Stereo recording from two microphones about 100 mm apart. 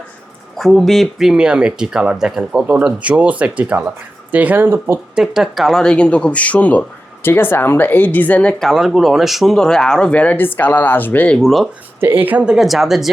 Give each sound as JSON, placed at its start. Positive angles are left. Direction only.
{"t": 0.5, "sound": "speech", "side_deg": 0}
{"t": 5.1, "sound": "speech", "side_deg": -5}
{"t": 8.7, "sound": "speech", "side_deg": 0}
{"t": 11.3, "sound": "speech", "side_deg": 0}
{"t": 11.9, "sound": "speech", "side_deg": -20}
{"t": 12.5, "sound": "speech", "side_deg": 0}